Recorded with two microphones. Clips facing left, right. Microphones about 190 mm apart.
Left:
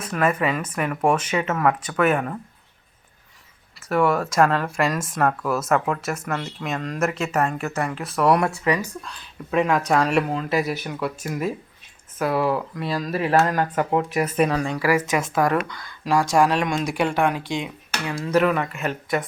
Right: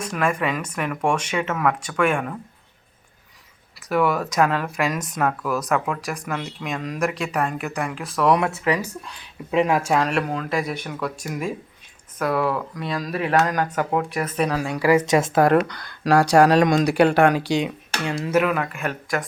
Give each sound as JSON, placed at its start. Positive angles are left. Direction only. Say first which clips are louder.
{"t": 0.0, "sound": "speech", "louder": "left 1 dB", "side_deg": 5}
{"t": 3.8, "sound": "speech", "louder": "left 1 dB", "side_deg": 0}
{"t": 9.0, "sound": "speech", "louder": "even", "side_deg": -15}
{"t": 9.9, "sound": "speech", "louder": "left 1 dB", "side_deg": 0}
{"t": 11.3, "sound": "speech", "louder": "left 1 dB", "side_deg": -10}
{"t": 14.8, "sound": "speech", "louder": "right 7 dB", "side_deg": -20}
{"t": 15.6, "sound": "speech", "louder": "right 6 dB", "side_deg": -65}
{"t": 17.9, "sound": "speech", "louder": "right 1 dB", "side_deg": -25}
{"t": 18.3, "sound": "speech", "louder": "left 2 dB", "side_deg": -5}